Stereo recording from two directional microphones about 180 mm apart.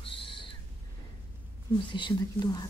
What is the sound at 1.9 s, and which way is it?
Speech, 25° left (ahead or behind).